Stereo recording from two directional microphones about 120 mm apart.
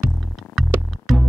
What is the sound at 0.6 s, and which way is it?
Music, centre (ahead or behind).